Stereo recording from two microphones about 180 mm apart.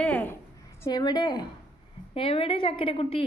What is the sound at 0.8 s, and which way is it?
A woman's voice, 25° left (ahead or behind).